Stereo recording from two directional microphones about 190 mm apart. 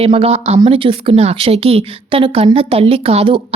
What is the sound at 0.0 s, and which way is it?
Speech, 30° right (ahead or behind).